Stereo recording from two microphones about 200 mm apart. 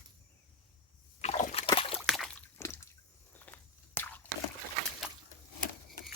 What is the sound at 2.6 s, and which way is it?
Water, 15° left (ahead or behind).